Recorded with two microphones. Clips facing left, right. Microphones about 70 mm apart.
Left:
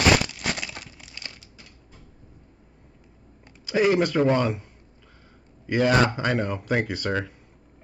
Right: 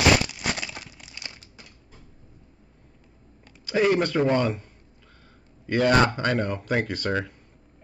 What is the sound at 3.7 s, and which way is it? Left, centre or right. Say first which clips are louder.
Speech: left 1 dB; centre.